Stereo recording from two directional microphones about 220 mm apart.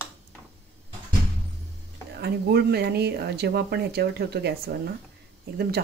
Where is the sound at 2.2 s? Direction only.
45° right (ahead or behind).